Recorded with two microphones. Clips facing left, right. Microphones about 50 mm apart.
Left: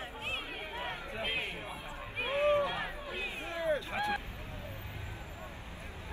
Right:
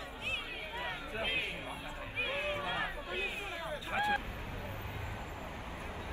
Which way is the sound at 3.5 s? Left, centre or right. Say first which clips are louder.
Left 8 dB; left.